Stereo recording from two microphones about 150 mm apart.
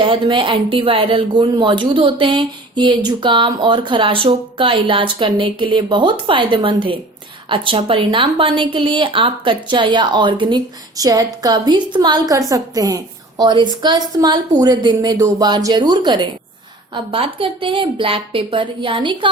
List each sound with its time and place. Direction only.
0.0 s speech: 35° right (ahead or behind)